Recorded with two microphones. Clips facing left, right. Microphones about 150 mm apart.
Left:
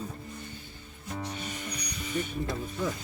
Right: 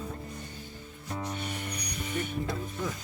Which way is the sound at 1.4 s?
60° right (ahead or behind).